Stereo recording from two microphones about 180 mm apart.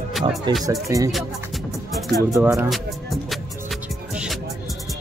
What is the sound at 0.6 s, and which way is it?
Speech, 20° right (ahead or behind).